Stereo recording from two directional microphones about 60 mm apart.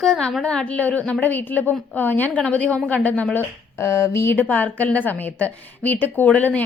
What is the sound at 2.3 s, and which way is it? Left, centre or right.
A woman's voice, left.